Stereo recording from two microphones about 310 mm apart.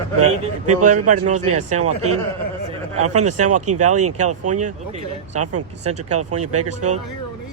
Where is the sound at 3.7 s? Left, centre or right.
Right.